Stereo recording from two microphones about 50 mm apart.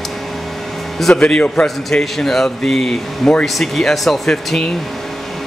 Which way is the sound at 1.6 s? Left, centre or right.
Centre.